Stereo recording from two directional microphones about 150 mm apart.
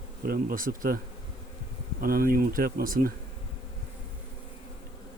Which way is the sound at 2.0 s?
75° right (ahead or behind).